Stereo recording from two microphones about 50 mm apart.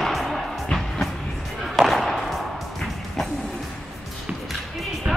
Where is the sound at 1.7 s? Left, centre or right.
Centre.